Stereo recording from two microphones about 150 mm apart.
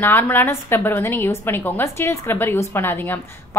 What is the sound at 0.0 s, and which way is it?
A woman's voice, 15° left (ahead or behind).